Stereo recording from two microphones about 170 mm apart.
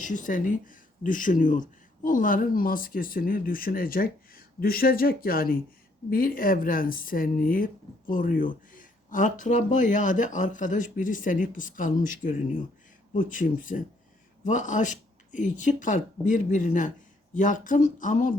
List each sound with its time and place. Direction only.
0.0 s speech: 50° left (ahead or behind)